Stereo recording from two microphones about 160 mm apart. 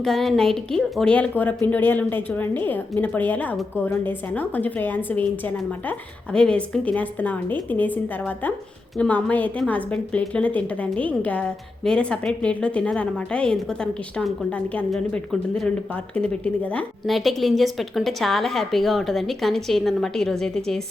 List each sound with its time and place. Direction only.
0.0 s a woman's voice: centre (ahead or behind)